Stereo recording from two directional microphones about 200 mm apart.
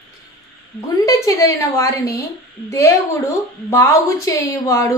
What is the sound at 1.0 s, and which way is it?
A woman's voice, 15° left (ahead or behind).